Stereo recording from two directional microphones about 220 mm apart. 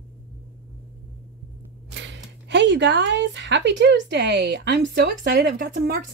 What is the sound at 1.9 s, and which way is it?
Speech, 50° right (ahead or behind).